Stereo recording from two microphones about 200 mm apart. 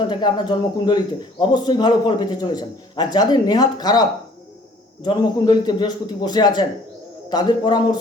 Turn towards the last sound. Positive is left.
turn(degrees=20)  # may be behind; listen again after turning